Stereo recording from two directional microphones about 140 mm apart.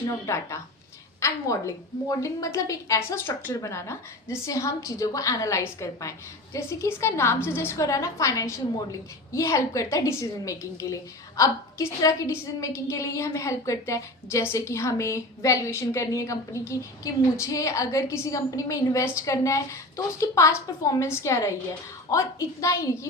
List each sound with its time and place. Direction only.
0.1 s a woman's voice: 20° left (ahead or behind)